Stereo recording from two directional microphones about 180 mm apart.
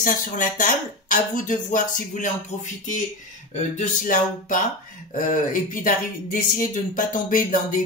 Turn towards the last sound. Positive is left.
turn(degrees=45)  # may be behind; listen again after turning